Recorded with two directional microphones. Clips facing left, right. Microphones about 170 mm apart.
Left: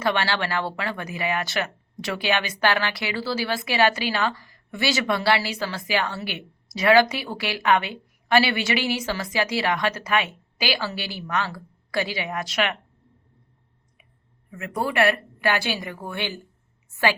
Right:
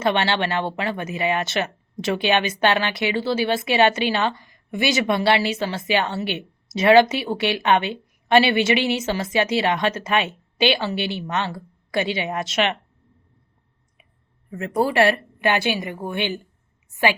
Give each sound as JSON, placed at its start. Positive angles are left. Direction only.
{"t": 0.0, "sound": "speech", "side_deg": -20}
{"t": 14.5, "sound": "a woman's voice", "side_deg": -35}